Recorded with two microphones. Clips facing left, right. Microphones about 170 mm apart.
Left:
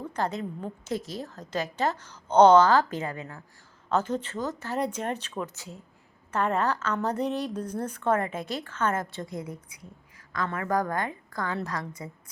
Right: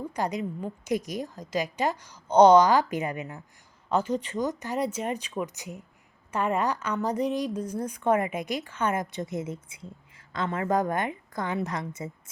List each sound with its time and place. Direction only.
0.1 s a woman's voice: 15° right (ahead or behind)